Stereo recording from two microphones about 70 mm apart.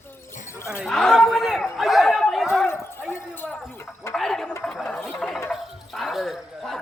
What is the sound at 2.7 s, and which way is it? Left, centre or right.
Bow-wow, left.